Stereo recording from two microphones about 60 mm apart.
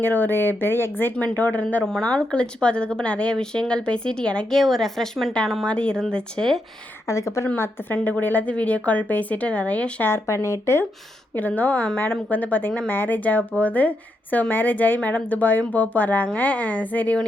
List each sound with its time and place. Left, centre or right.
0.0 s speech: left
1.1 s a woman's voice: left
1.9 s speech: centre
5.6 s speech: centre
7.1 s speech: left
7.5 s a woman's voice: left
10.1 s speech: left
11.3 s a woman's voice: left